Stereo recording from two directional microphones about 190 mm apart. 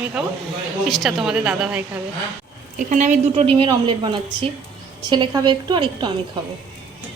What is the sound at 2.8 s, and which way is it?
A woman's voice, 40° right (ahead or behind).